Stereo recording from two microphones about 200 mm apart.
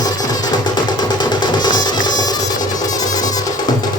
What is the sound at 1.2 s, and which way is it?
Music, 20° left (ahead or behind).